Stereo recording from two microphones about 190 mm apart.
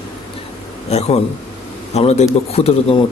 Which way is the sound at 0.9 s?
35° left (ahead or behind).